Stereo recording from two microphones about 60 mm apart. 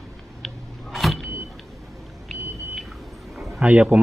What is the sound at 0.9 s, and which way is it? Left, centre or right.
Vehicle, centre.